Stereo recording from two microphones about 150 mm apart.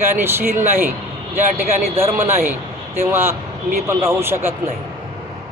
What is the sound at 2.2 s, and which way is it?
Speech, 15° right (ahead or behind).